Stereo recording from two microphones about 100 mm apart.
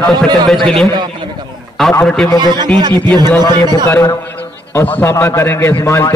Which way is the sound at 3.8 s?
25° left (ahead or behind).